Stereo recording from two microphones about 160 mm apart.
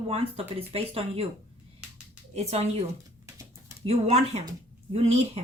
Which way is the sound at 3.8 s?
40° right (ahead or behind).